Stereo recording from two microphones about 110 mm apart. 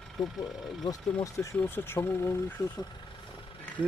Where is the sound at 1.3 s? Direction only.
25° left (ahead or behind).